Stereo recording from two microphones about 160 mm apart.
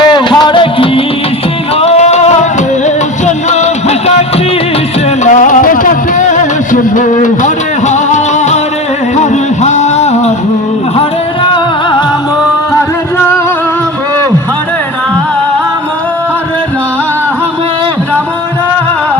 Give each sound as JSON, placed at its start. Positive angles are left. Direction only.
{"t": 0.0, "sound": "music", "side_deg": 30}
{"t": 5.2, "sound": "music", "side_deg": 55}
{"t": 11.5, "sound": "music", "side_deg": 30}